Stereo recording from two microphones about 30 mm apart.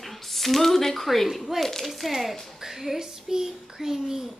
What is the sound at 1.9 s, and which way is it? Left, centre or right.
A child's voice, centre.